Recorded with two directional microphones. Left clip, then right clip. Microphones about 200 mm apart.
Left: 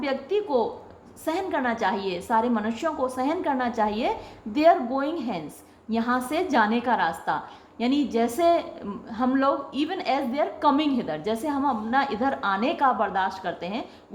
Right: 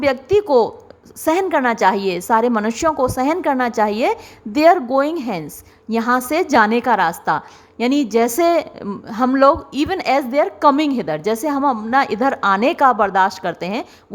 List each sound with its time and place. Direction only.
0.0 s a woman's voice: 45° right (ahead or behind)